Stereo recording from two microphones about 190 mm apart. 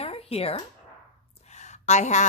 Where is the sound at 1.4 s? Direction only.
35° left (ahead or behind).